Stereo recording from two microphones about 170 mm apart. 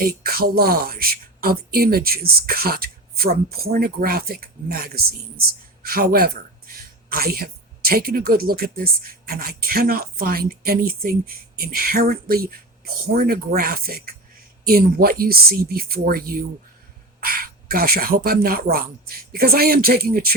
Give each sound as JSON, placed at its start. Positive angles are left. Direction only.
{"t": 0.0, "sound": "speech", "side_deg": -60}